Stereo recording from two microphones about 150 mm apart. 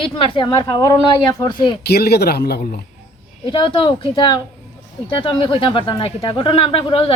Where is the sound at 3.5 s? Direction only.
35° left (ahead or behind).